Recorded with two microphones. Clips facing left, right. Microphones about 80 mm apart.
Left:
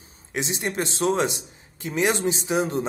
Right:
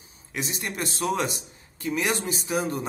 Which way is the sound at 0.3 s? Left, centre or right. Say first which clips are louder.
Left 4 dB; left.